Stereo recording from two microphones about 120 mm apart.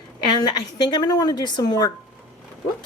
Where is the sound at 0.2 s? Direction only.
35° left (ahead or behind).